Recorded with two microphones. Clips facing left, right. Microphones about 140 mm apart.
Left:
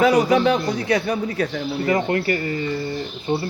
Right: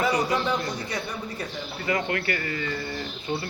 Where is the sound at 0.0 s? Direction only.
90° left.